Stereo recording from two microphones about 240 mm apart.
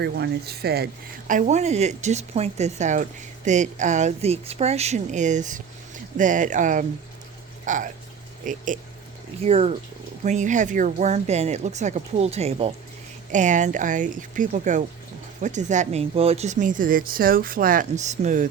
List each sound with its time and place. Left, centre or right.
0.0 s a woman's voice: right